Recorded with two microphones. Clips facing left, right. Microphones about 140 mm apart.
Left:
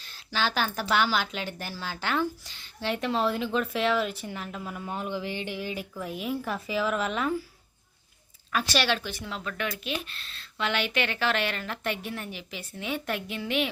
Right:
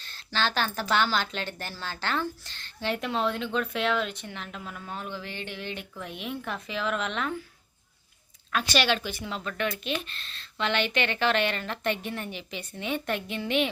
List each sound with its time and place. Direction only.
0.0 s speech: 10° left (ahead or behind)
8.5 s speech: centre (ahead or behind)